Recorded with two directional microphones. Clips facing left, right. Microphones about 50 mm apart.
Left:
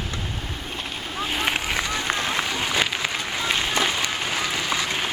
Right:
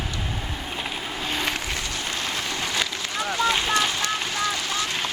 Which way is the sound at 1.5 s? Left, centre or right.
Left.